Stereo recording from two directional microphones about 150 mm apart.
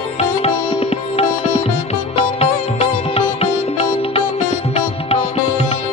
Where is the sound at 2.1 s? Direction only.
40° left (ahead or behind).